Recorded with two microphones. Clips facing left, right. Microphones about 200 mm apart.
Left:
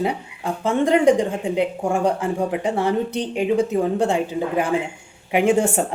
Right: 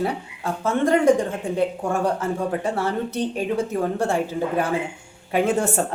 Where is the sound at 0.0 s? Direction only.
15° left (ahead or behind).